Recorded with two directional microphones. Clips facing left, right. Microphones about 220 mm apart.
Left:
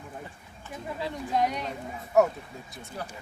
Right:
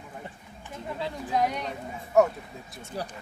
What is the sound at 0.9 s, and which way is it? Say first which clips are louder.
Speech: even; centre (ahead or behind).